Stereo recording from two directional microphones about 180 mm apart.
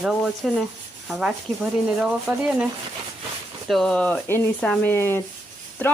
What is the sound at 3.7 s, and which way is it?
Rub, 5° left (ahead or behind).